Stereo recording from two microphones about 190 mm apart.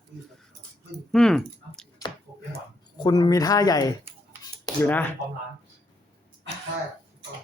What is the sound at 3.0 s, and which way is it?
Speech, 20° left (ahead or behind).